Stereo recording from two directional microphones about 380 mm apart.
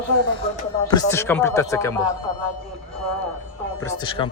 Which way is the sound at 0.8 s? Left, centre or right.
Centre.